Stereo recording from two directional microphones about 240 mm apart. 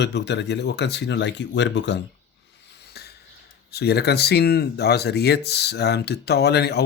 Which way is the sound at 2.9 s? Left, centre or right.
Left.